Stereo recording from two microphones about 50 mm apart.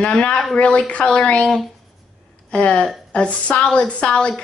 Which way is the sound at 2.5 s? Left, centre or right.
Left.